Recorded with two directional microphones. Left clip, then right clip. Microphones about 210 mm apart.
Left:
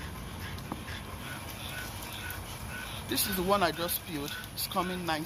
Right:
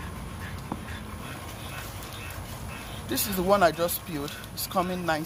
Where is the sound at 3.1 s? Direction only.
45° right (ahead or behind).